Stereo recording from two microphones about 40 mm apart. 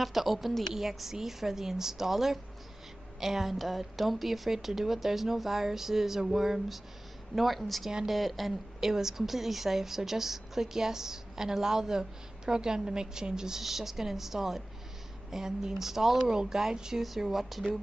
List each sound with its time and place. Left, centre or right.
0.0 s a woman's voice: centre